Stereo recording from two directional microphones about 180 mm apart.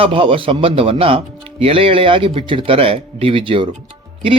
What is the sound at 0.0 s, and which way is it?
Speech, 30° right (ahead or behind).